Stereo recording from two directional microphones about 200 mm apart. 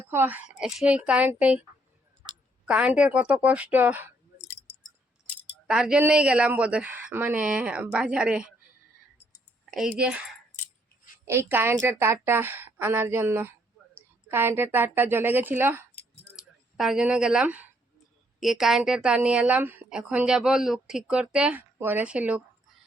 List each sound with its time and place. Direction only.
0.1 s a woman's voice: 10° right (ahead or behind)
2.6 s a woman's voice: 5° right (ahead or behind)
5.6 s a woman's voice: 5° right (ahead or behind)
9.6 s a sound: centre (ahead or behind)
10.0 s a woman's voice: 5° right (ahead or behind)
11.3 s a woman's voice: 10° right (ahead or behind)